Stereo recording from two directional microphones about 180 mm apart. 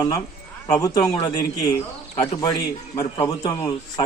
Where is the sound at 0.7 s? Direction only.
20° left (ahead or behind).